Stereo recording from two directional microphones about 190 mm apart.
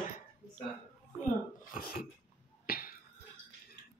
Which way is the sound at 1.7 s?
50° left (ahead or behind).